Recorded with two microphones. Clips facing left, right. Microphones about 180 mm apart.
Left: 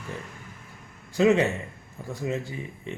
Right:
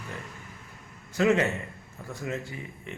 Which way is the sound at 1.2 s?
20° left (ahead or behind).